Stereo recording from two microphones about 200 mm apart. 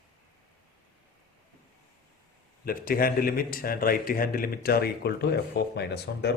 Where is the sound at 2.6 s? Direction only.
45° left (ahead or behind).